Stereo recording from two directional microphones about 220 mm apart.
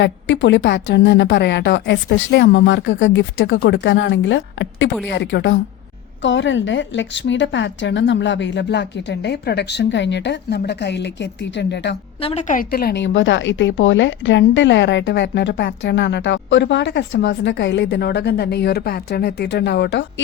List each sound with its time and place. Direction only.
0.0 s a woman's voice: 55° left (ahead or behind)
12.2 s a woman's voice: 30° left (ahead or behind); by 20.2 s 55° left (ahead or behind)